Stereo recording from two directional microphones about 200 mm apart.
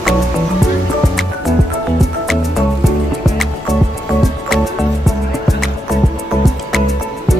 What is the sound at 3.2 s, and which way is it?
Music, centre (ahead or behind).